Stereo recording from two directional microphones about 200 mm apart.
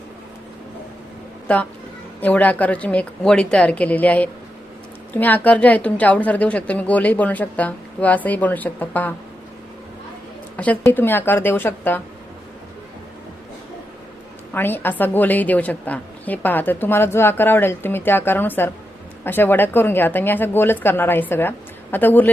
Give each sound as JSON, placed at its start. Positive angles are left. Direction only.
{"t": 1.5, "sound": "a woman's voice", "side_deg": 5}
{"t": 10.6, "sound": "a woman's voice", "side_deg": 10}
{"t": 14.5, "sound": "a woman's voice", "side_deg": 10}